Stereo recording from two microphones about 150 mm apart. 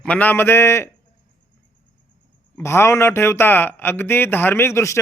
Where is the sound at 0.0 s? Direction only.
10° left (ahead or behind).